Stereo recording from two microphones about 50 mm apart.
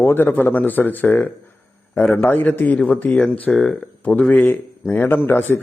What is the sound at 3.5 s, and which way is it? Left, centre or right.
Speech, centre.